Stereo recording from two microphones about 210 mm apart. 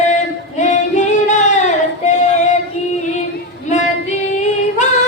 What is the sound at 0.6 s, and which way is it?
Female singing, 35° left (ahead or behind).